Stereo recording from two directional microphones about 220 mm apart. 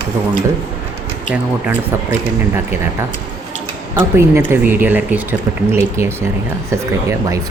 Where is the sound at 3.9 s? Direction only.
10° right (ahead or behind).